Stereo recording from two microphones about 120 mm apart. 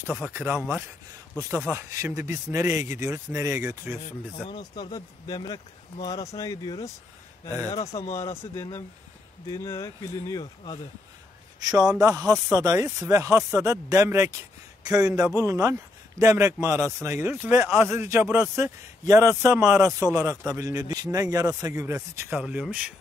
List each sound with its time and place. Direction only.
0.0 s a man's voice: 20° right (ahead or behind)
1.7 s a man's voice: 25° right (ahead or behind)
4.0 s a man's voice: 40° left (ahead or behind)
7.8 s speech: 65° left (ahead or behind)
9.5 s speech: 25° left (ahead or behind)
11.6 s a man's voice: 30° right (ahead or behind); by 22.9 s 10° right (ahead or behind)